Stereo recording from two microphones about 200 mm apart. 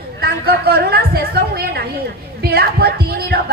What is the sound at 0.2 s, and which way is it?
A woman's voice, 50° right (ahead or behind).